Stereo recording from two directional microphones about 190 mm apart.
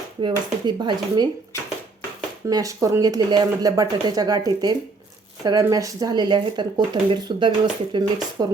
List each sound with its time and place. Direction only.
0.2 s speech: 25° right (ahead or behind)
2.5 s speech: 20° right (ahead or behind)